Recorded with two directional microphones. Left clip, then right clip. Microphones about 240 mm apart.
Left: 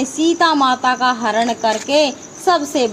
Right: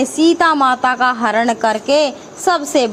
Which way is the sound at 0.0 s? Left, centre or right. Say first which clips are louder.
Right 2 dB; centre.